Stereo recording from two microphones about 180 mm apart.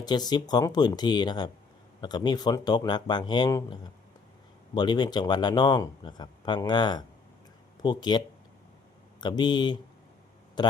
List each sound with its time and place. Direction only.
0.0 s speech: 20° left (ahead or behind)
9.2 s a man's voice: 25° left (ahead or behind)